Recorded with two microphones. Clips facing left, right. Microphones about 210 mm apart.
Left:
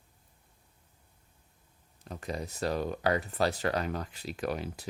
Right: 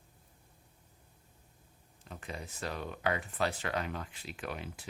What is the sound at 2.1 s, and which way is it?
Speech, 40° left (ahead or behind).